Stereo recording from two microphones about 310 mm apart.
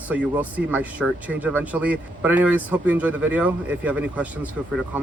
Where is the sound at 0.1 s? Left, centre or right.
Centre.